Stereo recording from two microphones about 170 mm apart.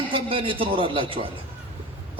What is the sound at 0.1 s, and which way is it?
A man's voice, 30° right (ahead or behind).